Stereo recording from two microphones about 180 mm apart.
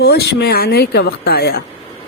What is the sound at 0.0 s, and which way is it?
A woman's voice, 65° left (ahead or behind).